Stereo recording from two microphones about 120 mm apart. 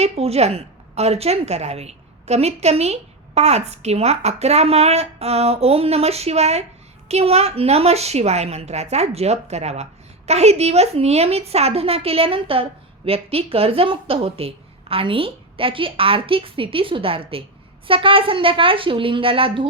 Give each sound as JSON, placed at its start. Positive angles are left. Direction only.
{"t": 0.0, "sound": "a woman's voice", "side_deg": -60}